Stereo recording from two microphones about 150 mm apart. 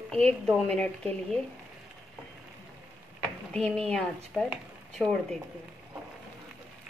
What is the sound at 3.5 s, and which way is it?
A woman's voice, 5° left (ahead or behind).